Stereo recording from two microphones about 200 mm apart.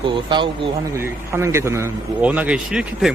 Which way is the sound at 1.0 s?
15° right (ahead or behind).